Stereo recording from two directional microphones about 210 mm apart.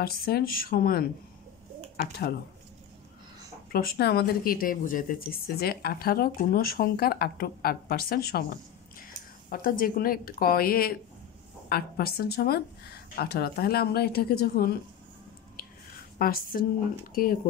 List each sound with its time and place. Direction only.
0.0 s speech: 45° left (ahead or behind)
2.2 s speech: 45° left (ahead or behind)
3.7 s speech: 45° left (ahead or behind)
16.2 s speech: 45° left (ahead or behind)